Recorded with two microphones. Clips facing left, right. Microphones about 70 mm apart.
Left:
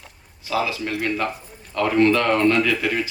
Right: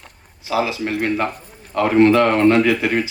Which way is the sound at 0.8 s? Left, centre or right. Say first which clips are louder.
Right 4 dB; right.